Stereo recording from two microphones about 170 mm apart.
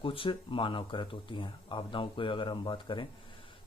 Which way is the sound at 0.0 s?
30° left (ahead or behind).